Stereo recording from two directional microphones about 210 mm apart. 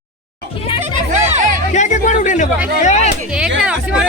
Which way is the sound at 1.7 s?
35° left (ahead or behind).